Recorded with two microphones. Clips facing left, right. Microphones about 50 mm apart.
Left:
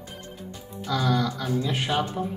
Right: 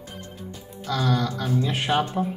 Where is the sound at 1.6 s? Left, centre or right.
Centre.